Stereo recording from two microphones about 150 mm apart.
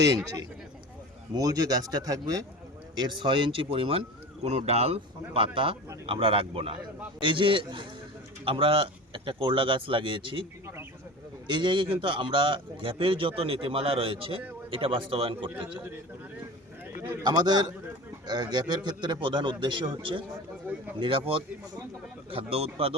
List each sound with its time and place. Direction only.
1.4 s a man's voice: 25° right (ahead or behind)
11.4 s a man's voice: 30° right (ahead or behind)
17.2 s a man's voice: 30° right (ahead or behind)